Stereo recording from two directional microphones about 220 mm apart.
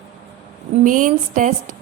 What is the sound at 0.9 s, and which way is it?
Speech, 35° right (ahead or behind).